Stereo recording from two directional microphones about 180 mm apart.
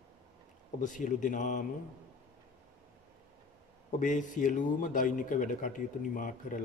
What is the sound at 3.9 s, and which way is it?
A man's voice, 45° left (ahead or behind).